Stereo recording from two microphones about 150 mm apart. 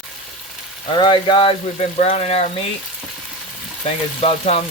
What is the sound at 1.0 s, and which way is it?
Frying, 35° left (ahead or behind).